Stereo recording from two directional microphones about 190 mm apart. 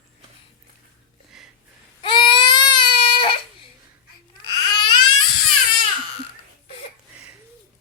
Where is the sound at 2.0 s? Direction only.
25° left (ahead or behind).